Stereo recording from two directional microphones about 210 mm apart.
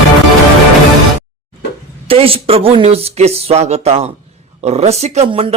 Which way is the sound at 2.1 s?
25° right (ahead or behind).